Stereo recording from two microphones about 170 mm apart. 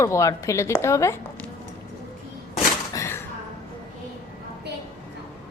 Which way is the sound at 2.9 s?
15° left (ahead or behind).